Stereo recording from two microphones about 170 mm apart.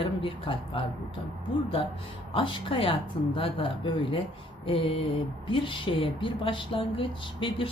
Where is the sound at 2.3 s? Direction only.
30° left (ahead or behind).